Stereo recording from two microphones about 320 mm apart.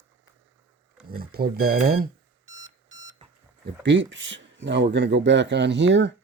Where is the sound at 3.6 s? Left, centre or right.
Right.